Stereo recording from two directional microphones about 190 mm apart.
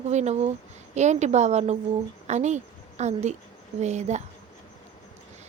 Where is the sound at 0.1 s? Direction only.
35° right (ahead or behind).